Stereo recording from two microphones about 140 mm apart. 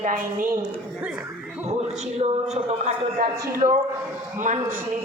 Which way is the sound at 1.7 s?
50° right (ahead or behind).